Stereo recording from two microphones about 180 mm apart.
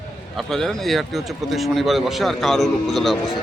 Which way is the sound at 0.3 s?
Centre (ahead or behind).